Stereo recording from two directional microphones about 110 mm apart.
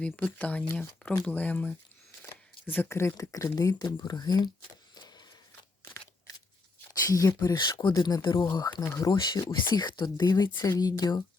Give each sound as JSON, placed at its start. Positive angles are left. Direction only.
{"t": 0.0, "sound": "speech", "side_deg": 15}
{"t": 4.9, "sound": "a sound", "side_deg": 40}
{"t": 5.8, "sound": "scissors", "side_deg": 25}
{"t": 7.1, "sound": "speech", "side_deg": 30}